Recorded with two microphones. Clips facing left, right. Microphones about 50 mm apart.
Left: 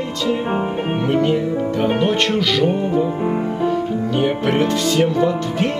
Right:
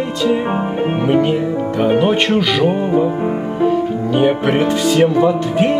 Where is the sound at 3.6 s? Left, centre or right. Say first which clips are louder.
Right 7 dB; centre.